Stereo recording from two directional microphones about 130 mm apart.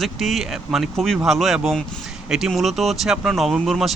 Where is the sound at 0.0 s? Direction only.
Centre (ahead or behind).